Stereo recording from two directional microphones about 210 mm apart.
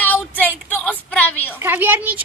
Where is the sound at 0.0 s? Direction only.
10° left (ahead or behind).